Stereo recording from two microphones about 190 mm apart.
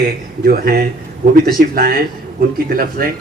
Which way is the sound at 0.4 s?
55° right (ahead or behind).